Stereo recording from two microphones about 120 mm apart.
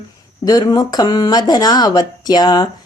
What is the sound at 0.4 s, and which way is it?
Speech, 30° left (ahead or behind).